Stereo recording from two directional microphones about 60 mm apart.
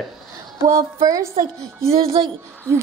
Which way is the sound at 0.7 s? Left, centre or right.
Right.